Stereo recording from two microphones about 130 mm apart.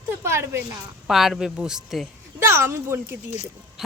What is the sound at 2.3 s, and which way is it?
Speech, 20° right (ahead or behind).